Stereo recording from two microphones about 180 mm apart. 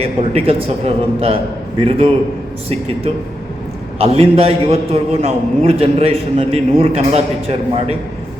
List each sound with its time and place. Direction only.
0.0 s a man's voice: 35° right (ahead or behind)